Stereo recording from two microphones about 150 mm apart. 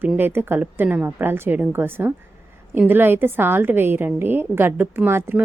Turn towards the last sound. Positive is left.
turn(degrees=-15)  # may be behind; listen again after turning